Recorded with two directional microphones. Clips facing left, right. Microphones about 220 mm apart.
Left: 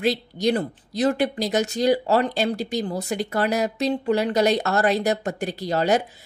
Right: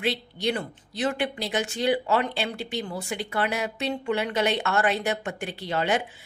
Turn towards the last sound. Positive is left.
turn(degrees=40)  # may be behind; listen again after turning